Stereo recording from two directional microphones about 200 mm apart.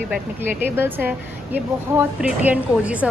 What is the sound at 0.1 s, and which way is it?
A woman's voice, 10° right (ahead or behind).